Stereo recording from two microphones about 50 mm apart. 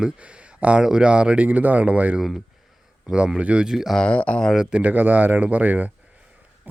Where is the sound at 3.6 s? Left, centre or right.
Centre.